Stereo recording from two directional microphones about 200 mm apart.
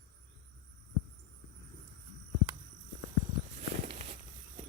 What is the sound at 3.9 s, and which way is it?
Walk, 30° right (ahead or behind).